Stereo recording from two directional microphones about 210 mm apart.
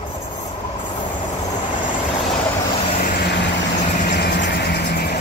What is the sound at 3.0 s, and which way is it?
Vehicle, 50° left (ahead or behind).